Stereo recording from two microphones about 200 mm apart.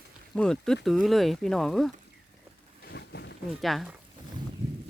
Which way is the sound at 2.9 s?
60° left (ahead or behind).